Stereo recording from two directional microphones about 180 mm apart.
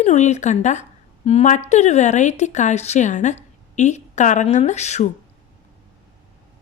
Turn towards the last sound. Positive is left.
turn(degrees=40)  # may be behind; listen again after turning